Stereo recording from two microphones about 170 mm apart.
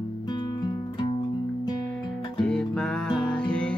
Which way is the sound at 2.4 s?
5° left (ahead or behind).